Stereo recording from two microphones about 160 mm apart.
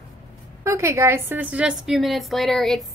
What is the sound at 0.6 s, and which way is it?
A woman's voice, 20° right (ahead or behind).